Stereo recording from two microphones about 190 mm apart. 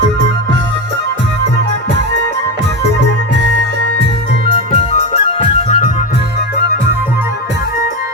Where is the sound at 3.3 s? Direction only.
65° right (ahead or behind).